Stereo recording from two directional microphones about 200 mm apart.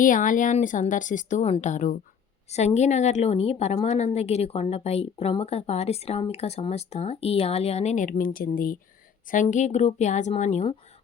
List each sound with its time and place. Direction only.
0.0 s a woman's voice: 40° left (ahead or behind)